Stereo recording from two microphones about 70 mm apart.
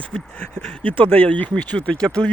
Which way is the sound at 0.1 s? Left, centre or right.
Centre.